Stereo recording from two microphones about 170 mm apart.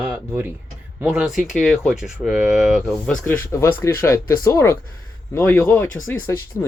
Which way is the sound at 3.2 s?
15° left (ahead or behind).